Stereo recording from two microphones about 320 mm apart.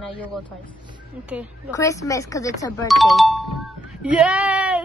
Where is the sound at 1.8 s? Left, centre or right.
Centre.